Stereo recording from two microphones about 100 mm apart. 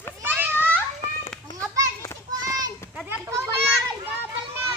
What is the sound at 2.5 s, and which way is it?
Children playing, 40° right (ahead or behind).